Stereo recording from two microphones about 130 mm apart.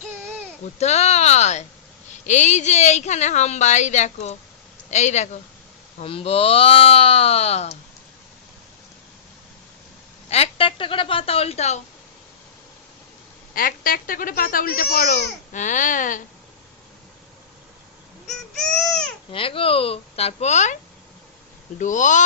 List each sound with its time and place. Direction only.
0.8 s a woman's voice: 55° left (ahead or behind)
6.0 s speech: 50° left (ahead or behind)
10.2 s speech: 55° left (ahead or behind)
13.5 s speech: 90° left
18.3 s baby cry: 5° left (ahead or behind)
19.3 s speech: 45° left (ahead or behind); by 20.7 s 60° left (ahead or behind)
21.8 s speech: 75° left (ahead or behind)